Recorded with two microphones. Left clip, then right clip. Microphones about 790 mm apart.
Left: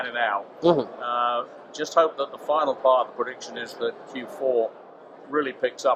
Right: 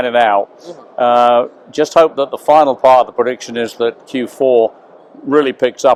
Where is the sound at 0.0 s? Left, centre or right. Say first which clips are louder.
Right 14 dB; right.